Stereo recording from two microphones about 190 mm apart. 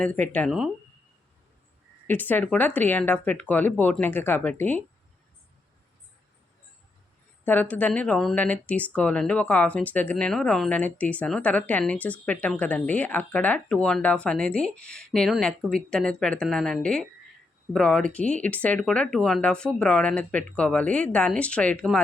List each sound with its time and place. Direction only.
0.0 s speech: 5° left (ahead or behind)
2.0 s speech: 10° left (ahead or behind)
7.4 s speech: 10° left (ahead or behind)